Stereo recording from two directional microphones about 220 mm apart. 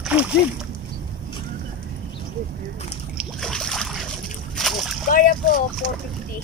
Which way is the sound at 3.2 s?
Centre (ahead or behind).